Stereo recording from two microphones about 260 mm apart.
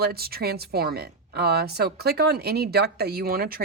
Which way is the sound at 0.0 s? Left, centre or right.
Right.